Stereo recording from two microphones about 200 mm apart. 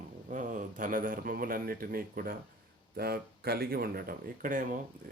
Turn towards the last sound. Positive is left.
turn(degrees=-45)  # may be behind; listen again after turning